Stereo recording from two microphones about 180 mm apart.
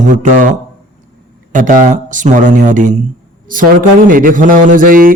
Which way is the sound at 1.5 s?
45° right (ahead or behind).